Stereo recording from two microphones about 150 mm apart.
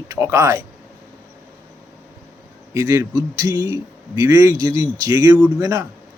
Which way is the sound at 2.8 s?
20° right (ahead or behind).